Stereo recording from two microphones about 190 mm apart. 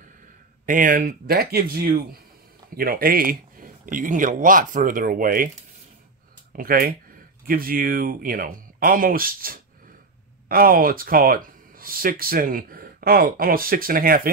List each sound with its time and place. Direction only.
0.7 s speech: 45° right (ahead or behind)
6.5 s speech: 50° right (ahead or behind)